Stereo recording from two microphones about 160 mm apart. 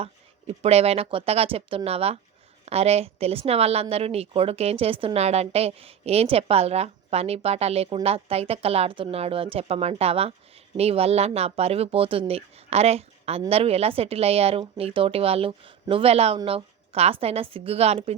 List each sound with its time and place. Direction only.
0.0 s a woman's voice: 40° right (ahead or behind)